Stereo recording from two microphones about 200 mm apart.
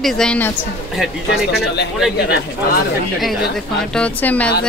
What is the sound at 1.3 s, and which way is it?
Speech, 55° left (ahead or behind).